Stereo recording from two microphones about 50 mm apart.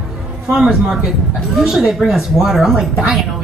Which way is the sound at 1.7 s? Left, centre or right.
Centre.